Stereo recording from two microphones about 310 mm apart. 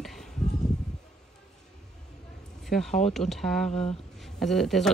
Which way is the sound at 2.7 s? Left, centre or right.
Centre.